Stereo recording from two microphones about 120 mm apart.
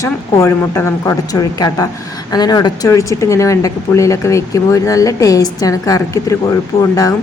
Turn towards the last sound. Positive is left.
turn(degrees=30)  # may be behind; listen again after turning